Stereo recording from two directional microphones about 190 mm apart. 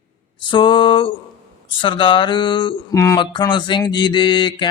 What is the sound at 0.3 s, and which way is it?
Mantra, 25° left (ahead or behind).